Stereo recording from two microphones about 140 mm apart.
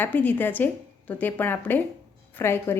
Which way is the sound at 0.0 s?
15° left (ahead or behind).